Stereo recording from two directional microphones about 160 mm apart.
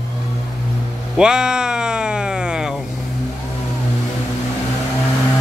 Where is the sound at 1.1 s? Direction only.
5° right (ahead or behind).